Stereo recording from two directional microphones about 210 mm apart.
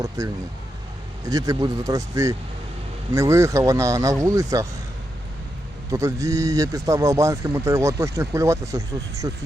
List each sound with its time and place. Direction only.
0.2 s speech: 15° right (ahead or behind)
5.9 s speech: 15° right (ahead or behind)